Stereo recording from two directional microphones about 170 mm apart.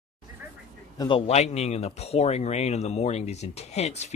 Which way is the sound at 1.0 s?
30° left (ahead or behind).